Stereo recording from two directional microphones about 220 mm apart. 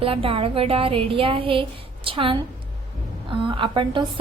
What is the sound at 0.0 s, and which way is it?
A woman's voice, 25° right (ahead or behind).